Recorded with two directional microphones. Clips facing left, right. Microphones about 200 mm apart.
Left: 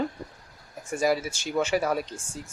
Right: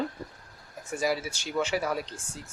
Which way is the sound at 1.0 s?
45° left (ahead or behind).